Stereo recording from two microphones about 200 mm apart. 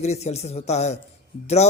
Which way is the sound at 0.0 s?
35° left (ahead or behind).